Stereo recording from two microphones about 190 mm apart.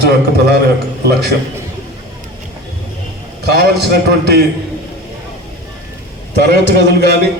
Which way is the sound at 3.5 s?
55° right (ahead or behind).